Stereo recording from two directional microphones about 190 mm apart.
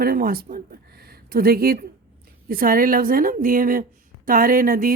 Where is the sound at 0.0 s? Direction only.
50° right (ahead or behind).